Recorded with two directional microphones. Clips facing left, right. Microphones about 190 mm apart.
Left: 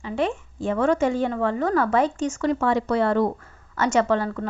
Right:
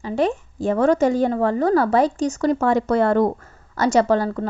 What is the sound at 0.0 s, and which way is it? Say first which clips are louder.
A woman's voice: right 4 dB; 40° right (ahead or behind).